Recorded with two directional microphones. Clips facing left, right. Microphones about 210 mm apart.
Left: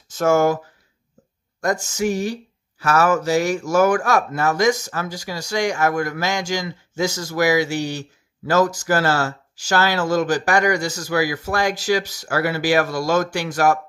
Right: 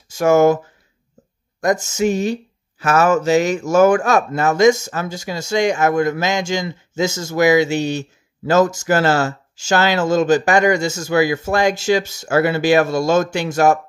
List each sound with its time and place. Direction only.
0.1 s speech: 15° right (ahead or behind)
1.6 s speech: 20° right (ahead or behind)